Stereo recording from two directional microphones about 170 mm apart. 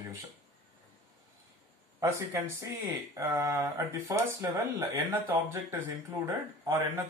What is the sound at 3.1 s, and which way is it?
Speech, 10° right (ahead or behind).